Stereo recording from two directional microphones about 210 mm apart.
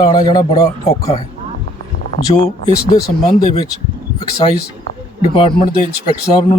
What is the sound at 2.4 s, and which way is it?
Speech, 40° left (ahead or behind).